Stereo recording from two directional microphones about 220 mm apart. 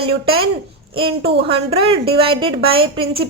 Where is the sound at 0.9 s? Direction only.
25° right (ahead or behind).